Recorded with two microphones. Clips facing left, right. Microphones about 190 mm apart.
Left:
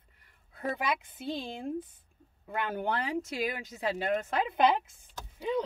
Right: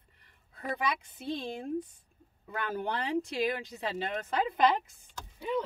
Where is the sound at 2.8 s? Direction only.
Centre (ahead or behind).